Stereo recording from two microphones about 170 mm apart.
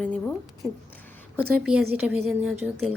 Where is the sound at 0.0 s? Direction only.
5° left (ahead or behind).